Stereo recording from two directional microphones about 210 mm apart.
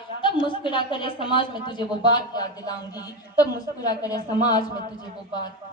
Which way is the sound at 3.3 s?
15° left (ahead or behind).